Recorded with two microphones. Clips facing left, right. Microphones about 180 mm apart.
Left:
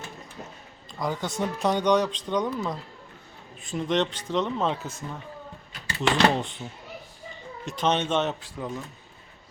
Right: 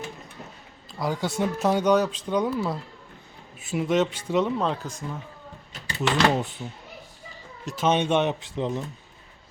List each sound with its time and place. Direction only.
0.9 s speech: 5° right (ahead or behind)
7.6 s speech: 5° right (ahead or behind); by 8.8 s 25° right (ahead or behind)